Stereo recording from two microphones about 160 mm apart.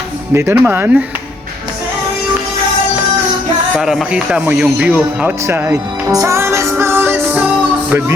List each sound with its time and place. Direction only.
0.3 s speech: 15° right (ahead or behind)
3.8 s speech: 5° right (ahead or behind)
6.1 s music: 20° right (ahead or behind)